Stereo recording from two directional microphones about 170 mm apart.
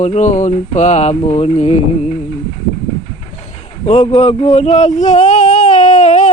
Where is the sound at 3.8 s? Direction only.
40° left (ahead or behind).